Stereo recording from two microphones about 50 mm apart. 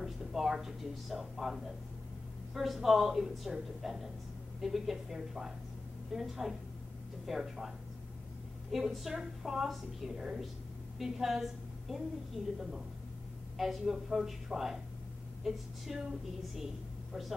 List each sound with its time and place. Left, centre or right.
0.0 s a woman's voice: centre
8.7 s a woman's voice: centre
12.4 s a woman's voice: right
13.6 s a woman's voice: centre